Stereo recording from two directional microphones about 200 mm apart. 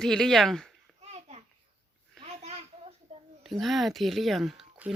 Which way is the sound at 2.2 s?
30° right (ahead or behind).